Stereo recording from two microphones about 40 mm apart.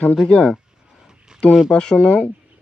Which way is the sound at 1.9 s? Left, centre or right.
Left.